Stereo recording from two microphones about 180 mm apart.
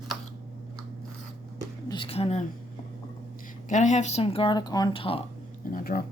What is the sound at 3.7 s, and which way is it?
Speech, 45° left (ahead or behind).